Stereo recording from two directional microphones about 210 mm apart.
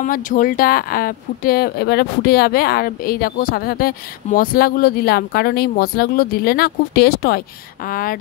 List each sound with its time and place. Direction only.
0.0 s speech: 40° left (ahead or behind)